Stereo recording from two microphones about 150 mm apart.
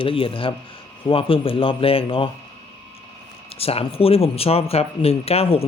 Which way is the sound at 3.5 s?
40° left (ahead or behind).